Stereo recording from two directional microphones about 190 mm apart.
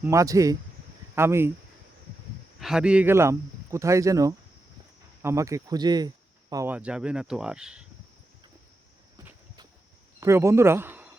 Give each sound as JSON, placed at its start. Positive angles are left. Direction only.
{"t": 0.0, "sound": "speech", "side_deg": -15}
{"t": 2.6, "sound": "speech", "side_deg": -5}
{"t": 6.7, "sound": "speech", "side_deg": -5}
{"t": 10.2, "sound": "speech", "side_deg": -15}